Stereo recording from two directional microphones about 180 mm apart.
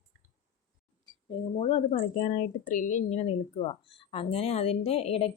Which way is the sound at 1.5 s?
35° left (ahead or behind).